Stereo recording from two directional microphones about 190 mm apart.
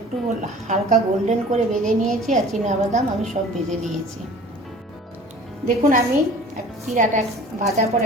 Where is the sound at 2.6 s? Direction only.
35° right (ahead or behind).